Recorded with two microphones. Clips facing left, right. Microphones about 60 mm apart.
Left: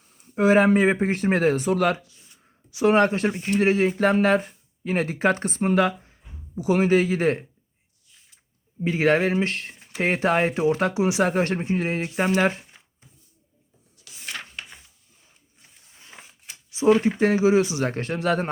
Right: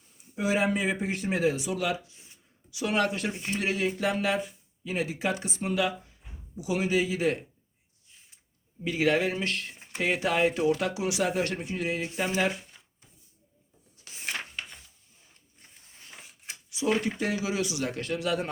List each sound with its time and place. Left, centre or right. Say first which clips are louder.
0.3 s speech: left 9 dB; left
2.6 s speech: left 9 dB; left
8.8 s speech: left 5 dB; left
9.7 s a sound: right 1 dB; right
10.0 s speech: left 4 dB; left
11.2 s speech: left 6 dB; left
14.0 s a sound: even; right
16.7 s speech: left 9 dB; left